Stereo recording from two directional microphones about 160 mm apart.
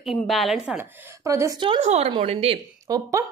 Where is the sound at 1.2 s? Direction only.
20° right (ahead or behind).